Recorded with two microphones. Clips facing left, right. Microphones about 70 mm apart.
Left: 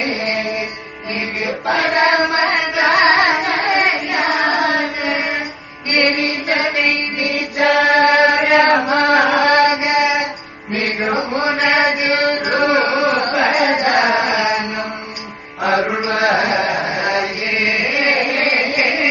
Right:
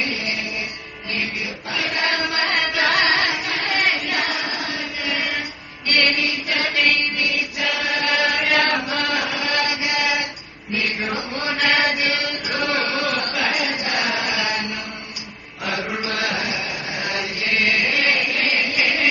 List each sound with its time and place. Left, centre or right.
0.0 s music: left
4.4 s child singing: left
5.0 s music: left
9.6 s mantra: left
10.7 s music: left
11.1 s chant: left
12.1 s a sound: left
15.6 s music: left
16.0 s a sound: left
16.9 s chant: left